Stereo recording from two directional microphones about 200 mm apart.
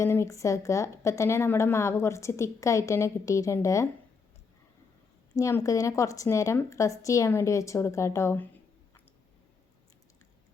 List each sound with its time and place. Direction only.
0.0 s a woman's voice: 15° left (ahead or behind)
5.4 s a woman's voice: 15° left (ahead or behind)